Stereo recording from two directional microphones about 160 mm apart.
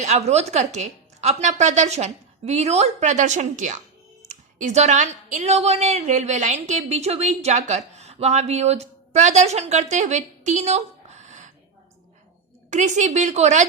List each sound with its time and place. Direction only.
0.0 s a woman's voice: 45° right (ahead or behind)
12.7 s a woman's voice: 50° right (ahead or behind)